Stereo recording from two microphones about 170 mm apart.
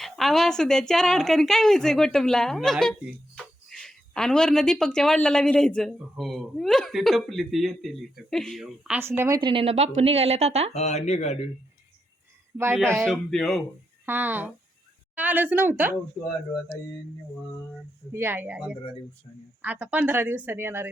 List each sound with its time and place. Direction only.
0.0 s a woman's voice: centre (ahead or behind); by 9.4 s 15° right (ahead or behind)
9.4 s a woman's voice: 30° right (ahead or behind)
10.8 s speech: 40° left (ahead or behind)
12.5 s a woman's voice: 15° right (ahead or behind)
13.1 s a woman's voice: centre (ahead or behind)
14.0 s a woman's voice: 10° right (ahead or behind)
18.1 s a woman's voice: 15° right (ahead or behind)